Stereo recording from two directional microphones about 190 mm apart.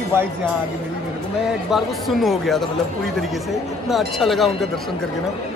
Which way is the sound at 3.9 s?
Centre (ahead or behind).